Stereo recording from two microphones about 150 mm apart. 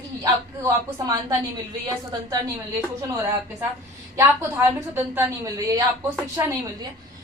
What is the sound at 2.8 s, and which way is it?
A woman's voice, 20° right (ahead or behind).